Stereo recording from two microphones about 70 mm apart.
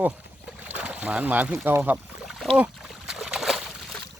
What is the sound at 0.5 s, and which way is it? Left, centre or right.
Boat, right.